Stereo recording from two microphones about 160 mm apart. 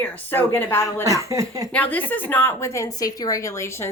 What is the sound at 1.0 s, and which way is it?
Speech, 20° right (ahead or behind).